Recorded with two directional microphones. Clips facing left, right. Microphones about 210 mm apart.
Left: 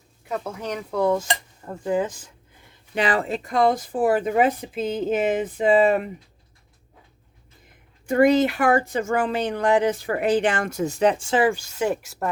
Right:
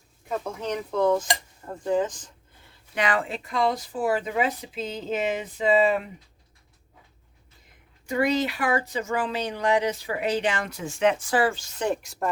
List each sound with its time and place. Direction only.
0.3 s speech: centre (ahead or behind)
2.9 s speech: 30° left (ahead or behind); by 6.1 s 50° left (ahead or behind)
8.0 s speech: 50° left (ahead or behind); by 11.4 s 25° left (ahead or behind)
11.4 s speech: 10° left (ahead or behind)